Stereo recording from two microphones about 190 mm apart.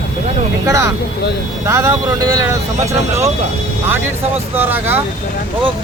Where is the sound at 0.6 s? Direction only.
15° right (ahead or behind).